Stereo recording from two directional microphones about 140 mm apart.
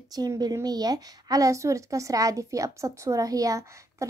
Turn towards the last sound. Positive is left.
turn(degrees=-20)  # may be behind; listen again after turning